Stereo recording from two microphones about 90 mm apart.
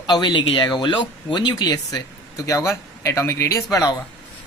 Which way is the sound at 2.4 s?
35° left (ahead or behind).